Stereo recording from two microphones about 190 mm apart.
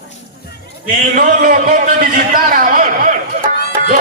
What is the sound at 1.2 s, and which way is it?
A man's voice, 45° right (ahead or behind).